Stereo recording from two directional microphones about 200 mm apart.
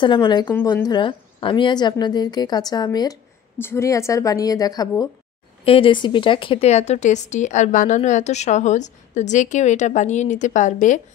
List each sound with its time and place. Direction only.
0.0 s a woman's voice: 20° left (ahead or behind); by 11.0 s 40° left (ahead or behind)